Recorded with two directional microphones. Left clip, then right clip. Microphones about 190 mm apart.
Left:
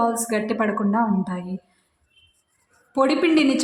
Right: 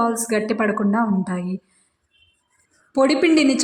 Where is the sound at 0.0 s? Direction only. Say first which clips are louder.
Right 1 dB; 15° right (ahead or behind).